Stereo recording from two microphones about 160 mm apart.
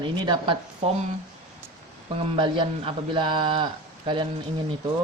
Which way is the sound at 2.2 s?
30° right (ahead or behind).